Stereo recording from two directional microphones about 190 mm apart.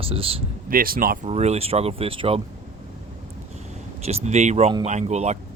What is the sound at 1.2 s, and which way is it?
Speech, 35° right (ahead or behind).